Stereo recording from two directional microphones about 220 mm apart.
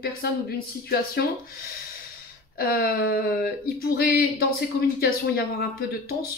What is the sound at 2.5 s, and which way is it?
Speech, 45° left (ahead or behind).